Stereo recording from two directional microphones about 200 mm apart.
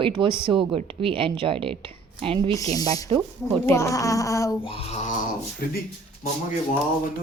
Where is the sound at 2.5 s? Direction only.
15° left (ahead or behind).